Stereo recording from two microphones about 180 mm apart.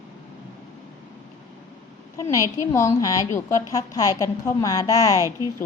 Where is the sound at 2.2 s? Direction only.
15° left (ahead or behind).